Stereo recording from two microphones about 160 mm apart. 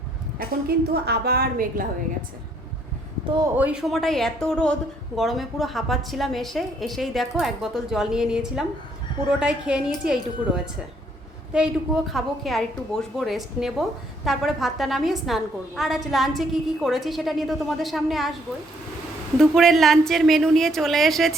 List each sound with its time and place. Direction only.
0.3 s a woman's voice: 80° right
3.6 s a woman's voice: 5° right (ahead or behind)
19.4 s a woman's voice: centre (ahead or behind)